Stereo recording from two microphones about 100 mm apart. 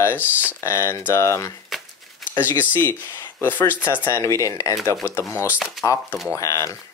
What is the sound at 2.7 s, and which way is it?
Speech, 20° left (ahead or behind).